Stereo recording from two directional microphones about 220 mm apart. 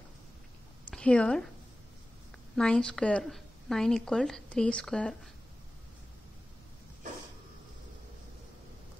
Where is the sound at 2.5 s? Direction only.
5° left (ahead or behind).